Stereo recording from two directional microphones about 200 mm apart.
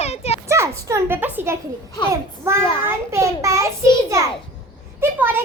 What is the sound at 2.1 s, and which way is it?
Speech, 15° right (ahead or behind).